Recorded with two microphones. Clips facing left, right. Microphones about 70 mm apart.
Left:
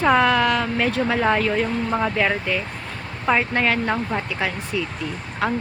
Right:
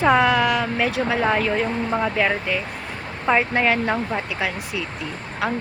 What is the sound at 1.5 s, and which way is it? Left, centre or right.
Speech, centre.